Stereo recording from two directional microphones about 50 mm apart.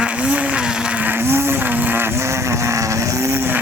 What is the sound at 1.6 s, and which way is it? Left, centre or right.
Vehicle, right.